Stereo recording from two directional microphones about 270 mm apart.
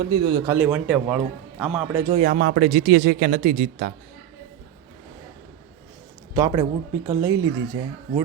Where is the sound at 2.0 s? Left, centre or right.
Right.